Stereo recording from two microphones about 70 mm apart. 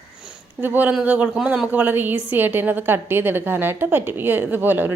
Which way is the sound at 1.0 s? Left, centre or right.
Centre.